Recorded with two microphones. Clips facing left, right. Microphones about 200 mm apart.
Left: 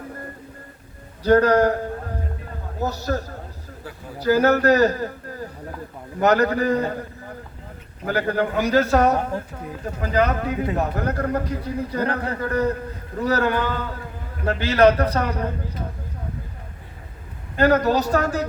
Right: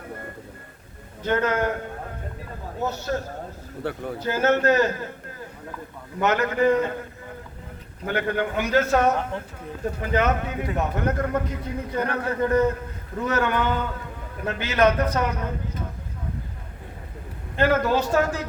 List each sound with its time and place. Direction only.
1.2 s a man's voice: 35° left (ahead or behind)
2.8 s a man's voice: 35° left (ahead or behind)
3.8 s speech: 65° right (ahead or behind)
4.2 s a man's voice: 35° left (ahead or behind)
6.1 s a man's voice: 35° left (ahead or behind)
8.0 s a man's voice: 35° left (ahead or behind)
17.6 s a man's voice: 40° left (ahead or behind)